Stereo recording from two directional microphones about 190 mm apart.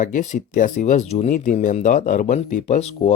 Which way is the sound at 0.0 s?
40° left (ahead or behind).